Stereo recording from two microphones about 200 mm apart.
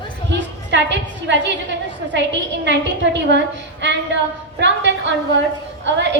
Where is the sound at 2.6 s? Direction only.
60° right (ahead or behind).